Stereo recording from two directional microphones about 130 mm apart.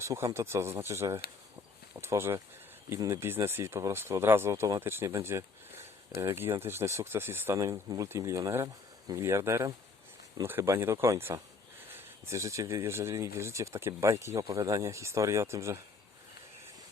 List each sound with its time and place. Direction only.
0.0 s speech: 25° right (ahead or behind)